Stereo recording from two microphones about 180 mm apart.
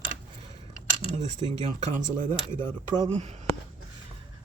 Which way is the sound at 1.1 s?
40° right (ahead or behind).